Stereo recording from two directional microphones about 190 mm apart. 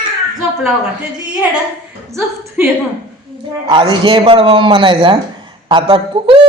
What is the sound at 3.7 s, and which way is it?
A man's voice, 25° right (ahead or behind).